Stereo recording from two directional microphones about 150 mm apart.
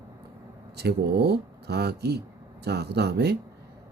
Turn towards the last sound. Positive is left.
turn(degrees=-90)